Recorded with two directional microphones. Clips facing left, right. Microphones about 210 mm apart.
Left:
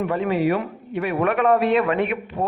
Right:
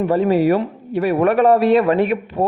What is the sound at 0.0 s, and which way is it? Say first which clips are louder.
A man's voice: right 6 dB; 35° right (ahead or behind).